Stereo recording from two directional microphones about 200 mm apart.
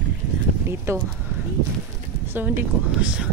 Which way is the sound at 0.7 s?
10° right (ahead or behind).